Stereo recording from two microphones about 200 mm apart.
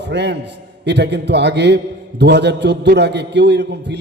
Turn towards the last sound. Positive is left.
turn(degrees=-60)  # may be behind; listen again after turning